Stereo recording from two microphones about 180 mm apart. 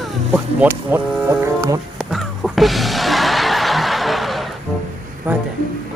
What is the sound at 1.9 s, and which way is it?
Music, centre (ahead or behind).